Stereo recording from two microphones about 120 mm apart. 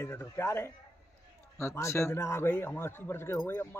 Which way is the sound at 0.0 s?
20° left (ahead or behind).